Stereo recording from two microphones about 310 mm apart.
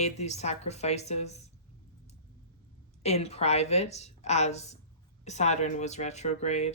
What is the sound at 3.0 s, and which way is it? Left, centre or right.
A woman's voice, centre.